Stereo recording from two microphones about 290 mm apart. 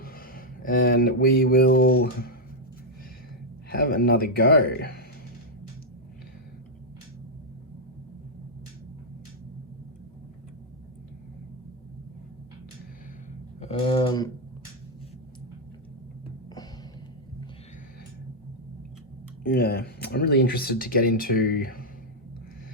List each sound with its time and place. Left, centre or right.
0.0 s a sound: left
3.7 s speech: left
13.6 s speech: centre
19.4 s speech: left